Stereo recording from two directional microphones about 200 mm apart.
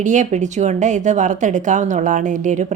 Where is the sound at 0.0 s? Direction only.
40° right (ahead or behind).